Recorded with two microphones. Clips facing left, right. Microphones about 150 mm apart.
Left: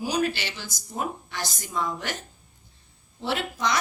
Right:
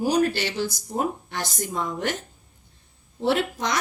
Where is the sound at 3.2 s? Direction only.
50° right (ahead or behind).